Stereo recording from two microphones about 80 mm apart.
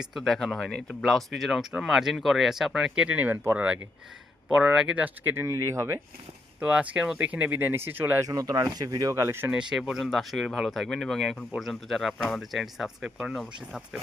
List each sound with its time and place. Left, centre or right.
0.0 s speech: centre
5.0 s speech: right
5.5 s speech: right
6.6 s speech: centre
8.2 s speech: right
9.1 s speech: right
9.5 s speech: centre